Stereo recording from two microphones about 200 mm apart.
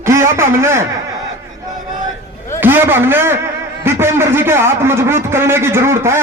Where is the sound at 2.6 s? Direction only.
10° right (ahead or behind).